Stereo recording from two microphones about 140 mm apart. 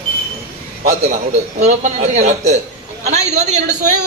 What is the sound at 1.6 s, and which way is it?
A man's voice, 55° right (ahead or behind).